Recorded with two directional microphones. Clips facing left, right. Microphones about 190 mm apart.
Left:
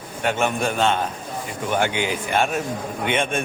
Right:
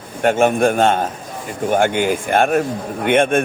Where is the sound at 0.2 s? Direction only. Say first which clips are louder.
Right 8 dB; 50° right (ahead or behind).